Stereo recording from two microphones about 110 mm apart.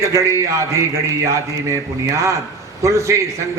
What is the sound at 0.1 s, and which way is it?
A man's voice, 30° right (ahead or behind).